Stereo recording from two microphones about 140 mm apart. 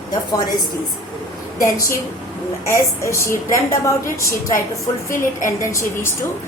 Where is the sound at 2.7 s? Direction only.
20° left (ahead or behind).